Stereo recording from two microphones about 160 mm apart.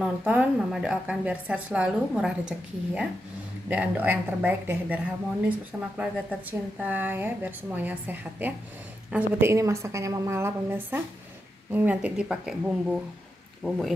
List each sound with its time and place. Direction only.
0.0 s a woman's voice: 10° right (ahead or behind)